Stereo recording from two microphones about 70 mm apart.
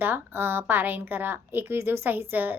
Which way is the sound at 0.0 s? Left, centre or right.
Right.